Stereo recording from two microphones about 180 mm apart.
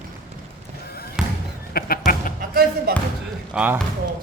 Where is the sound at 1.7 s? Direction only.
55° left (ahead or behind).